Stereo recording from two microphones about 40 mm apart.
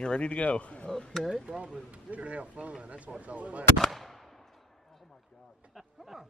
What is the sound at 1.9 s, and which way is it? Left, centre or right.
Speech, right.